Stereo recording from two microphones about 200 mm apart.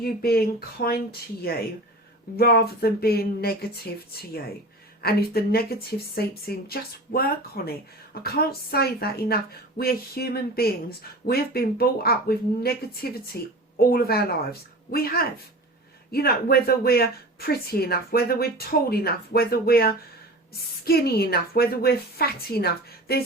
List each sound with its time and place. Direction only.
0.0 s a woman's voice: 50° left (ahead or behind)